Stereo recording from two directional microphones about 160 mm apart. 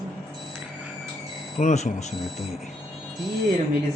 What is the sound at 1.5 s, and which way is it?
Speech, 50° left (ahead or behind).